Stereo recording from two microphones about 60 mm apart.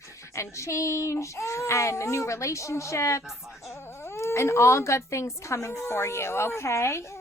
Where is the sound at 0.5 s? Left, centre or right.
Left.